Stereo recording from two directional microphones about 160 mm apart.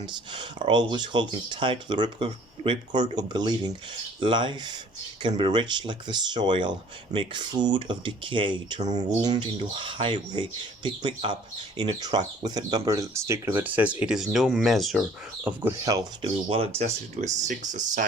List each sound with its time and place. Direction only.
0.0 s speech: 30° right (ahead or behind); by 15.6 s 10° right (ahead or behind)
15.8 s speech: 20° right (ahead or behind)
16.5 s speech: 40° right (ahead or behind)